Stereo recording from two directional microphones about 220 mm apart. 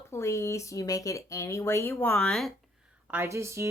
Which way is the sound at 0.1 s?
15° left (ahead or behind).